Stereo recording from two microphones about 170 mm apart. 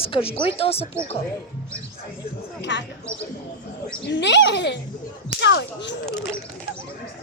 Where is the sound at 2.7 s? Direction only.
90° left.